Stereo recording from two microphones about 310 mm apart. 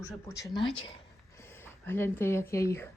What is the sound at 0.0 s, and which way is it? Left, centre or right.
Speech, centre.